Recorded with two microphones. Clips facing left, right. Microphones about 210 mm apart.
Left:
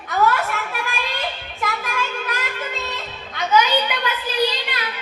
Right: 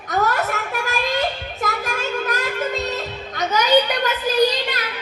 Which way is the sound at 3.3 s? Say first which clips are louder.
Right 2 dB; 40° right (ahead or behind).